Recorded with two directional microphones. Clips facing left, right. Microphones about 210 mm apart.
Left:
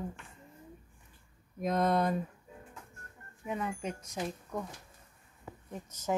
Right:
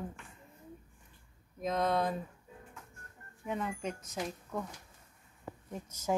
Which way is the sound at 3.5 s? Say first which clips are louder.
Even; centre (ahead or behind).